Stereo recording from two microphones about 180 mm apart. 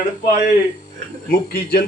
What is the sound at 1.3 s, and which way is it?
Speech, 55° left (ahead or behind).